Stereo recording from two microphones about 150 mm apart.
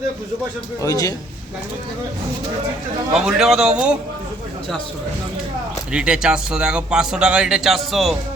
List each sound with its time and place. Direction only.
0.9 s a man's voice: 25° left (ahead or behind)
3.1 s speech: 5° right (ahead or behind)
5.9 s speech: 5° right (ahead or behind)